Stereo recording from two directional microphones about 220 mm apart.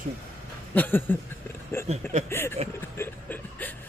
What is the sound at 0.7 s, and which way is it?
A man's voice, 10° left (ahead or behind).